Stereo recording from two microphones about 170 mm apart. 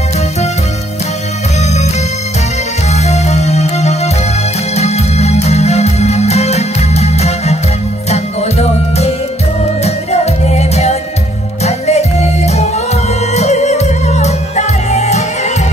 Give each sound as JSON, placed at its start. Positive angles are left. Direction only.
{"t": 2.9, "sound": "music", "side_deg": 40}